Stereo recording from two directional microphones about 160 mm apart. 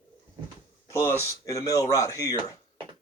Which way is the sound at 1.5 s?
20° left (ahead or behind).